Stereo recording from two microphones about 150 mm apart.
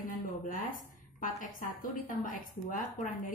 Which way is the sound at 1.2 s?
65° left (ahead or behind).